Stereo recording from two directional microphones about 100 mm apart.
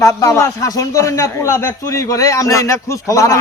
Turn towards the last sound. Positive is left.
turn(degrees=30)  # may be behind; listen again after turning